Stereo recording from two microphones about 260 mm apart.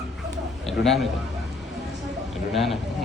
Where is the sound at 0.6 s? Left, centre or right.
Centre.